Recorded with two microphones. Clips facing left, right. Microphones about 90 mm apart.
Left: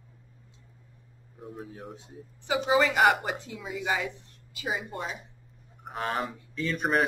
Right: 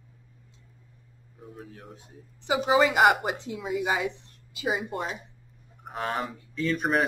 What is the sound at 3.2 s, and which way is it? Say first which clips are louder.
A woman's voice: right 4 dB; 20° right (ahead or behind).